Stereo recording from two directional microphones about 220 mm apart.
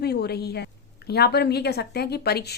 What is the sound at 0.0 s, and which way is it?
Speech, 45° left (ahead or behind).